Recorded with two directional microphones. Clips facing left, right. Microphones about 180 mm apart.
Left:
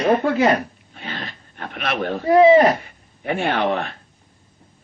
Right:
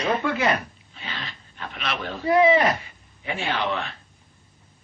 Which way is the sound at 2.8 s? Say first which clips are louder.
Left 7 dB; 55° left (ahead or behind).